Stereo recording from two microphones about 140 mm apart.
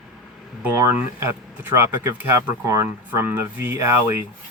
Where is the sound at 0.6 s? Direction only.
15° right (ahead or behind).